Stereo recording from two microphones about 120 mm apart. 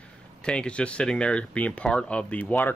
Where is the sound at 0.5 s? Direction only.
10° left (ahead or behind).